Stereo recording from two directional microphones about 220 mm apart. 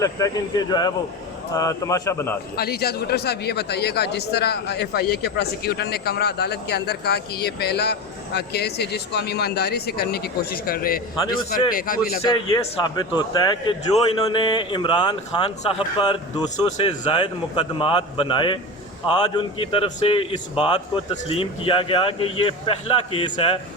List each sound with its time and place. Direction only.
0.0 s speech: 15° left (ahead or behind)
2.6 s speech: 45° left (ahead or behind)
11.3 s a man's voice: 20° left (ahead or behind)
11.7 s a man's voice: 40° left (ahead or behind)
12.2 s a man's voice: 20° left (ahead or behind)